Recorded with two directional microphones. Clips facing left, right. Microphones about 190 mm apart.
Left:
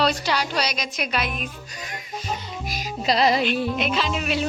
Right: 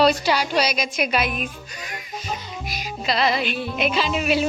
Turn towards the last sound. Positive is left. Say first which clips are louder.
# right 3 dB
turn(degrees=-5)  # may be behind; listen again after turning